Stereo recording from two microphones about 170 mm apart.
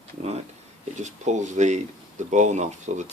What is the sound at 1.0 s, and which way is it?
Speech, 45° right (ahead or behind).